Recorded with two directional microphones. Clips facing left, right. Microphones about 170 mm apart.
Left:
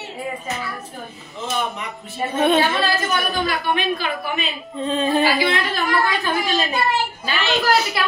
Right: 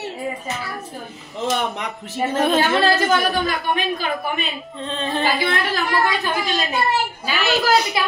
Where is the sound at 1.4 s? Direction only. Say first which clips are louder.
Right 3 dB; 70° right (ahead or behind).